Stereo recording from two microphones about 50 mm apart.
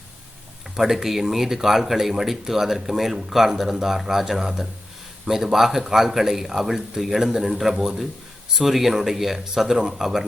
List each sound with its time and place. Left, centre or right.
0.8 s speech: centre